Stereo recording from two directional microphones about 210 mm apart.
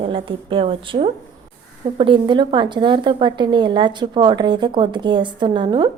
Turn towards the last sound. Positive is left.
turn(degrees=-20)  # may be behind; listen again after turning